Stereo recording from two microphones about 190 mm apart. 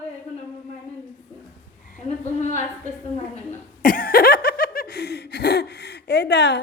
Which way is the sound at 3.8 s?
50° left (ahead or behind).